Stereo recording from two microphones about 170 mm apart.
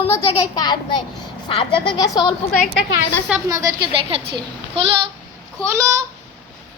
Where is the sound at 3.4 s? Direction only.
20° right (ahead or behind).